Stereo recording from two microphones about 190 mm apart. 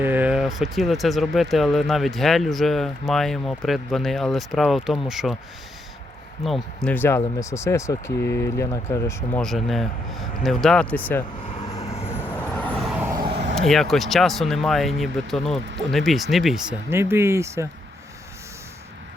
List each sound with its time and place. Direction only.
0.0 s speech: 10° right (ahead or behind)
6.4 s speech: centre (ahead or behind)
9.4 s speech: centre (ahead or behind)
11.9 s vehicle: 10° left (ahead or behind)
13.6 s speech: centre (ahead or behind)
16.9 s speech: 15° right (ahead or behind)